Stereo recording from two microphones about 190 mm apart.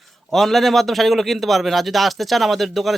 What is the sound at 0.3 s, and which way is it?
A man's voice, centre (ahead or behind).